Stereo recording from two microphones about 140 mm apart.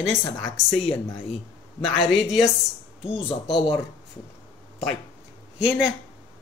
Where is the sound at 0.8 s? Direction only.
45° left (ahead or behind).